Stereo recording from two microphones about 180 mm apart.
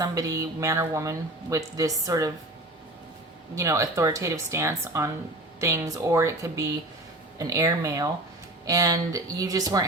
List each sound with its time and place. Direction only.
0.0 s speech: 20° right (ahead or behind)
3.5 s a woman's voice: 15° right (ahead or behind)